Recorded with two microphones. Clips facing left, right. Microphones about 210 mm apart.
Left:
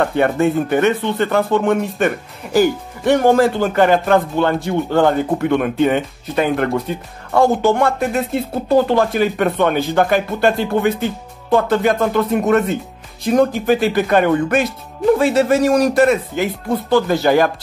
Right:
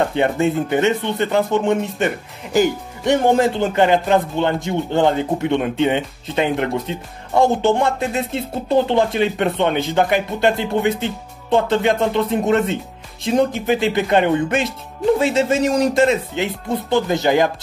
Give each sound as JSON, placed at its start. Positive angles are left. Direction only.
{"t": 0.0, "sound": "speech", "side_deg": -20}